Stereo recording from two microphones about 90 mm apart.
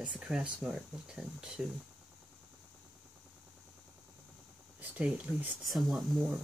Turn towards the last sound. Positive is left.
turn(degrees=0)  # may be behind; listen again after turning